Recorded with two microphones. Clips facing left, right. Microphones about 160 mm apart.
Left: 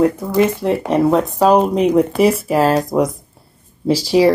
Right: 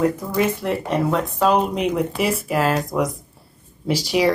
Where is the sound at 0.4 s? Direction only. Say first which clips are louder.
Left 6 dB; 30° left (ahead or behind).